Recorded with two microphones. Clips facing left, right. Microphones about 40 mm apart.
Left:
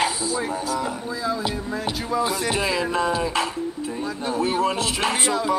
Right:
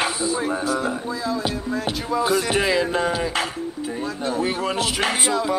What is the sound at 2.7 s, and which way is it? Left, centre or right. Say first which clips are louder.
Speech: right 3 dB; right.